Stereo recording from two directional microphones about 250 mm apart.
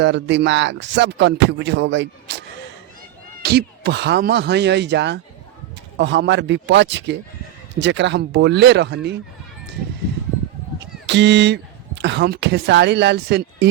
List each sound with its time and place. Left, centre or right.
0.0 s speech: right
3.4 s speech: right
11.0 s a woman's voice: right